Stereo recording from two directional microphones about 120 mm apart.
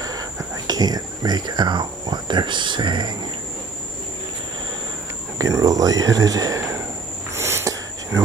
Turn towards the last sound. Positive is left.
turn(degrees=-25)  # may be behind; listen again after turning